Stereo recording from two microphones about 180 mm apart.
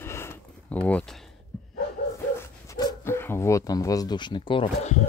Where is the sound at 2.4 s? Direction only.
20° left (ahead or behind).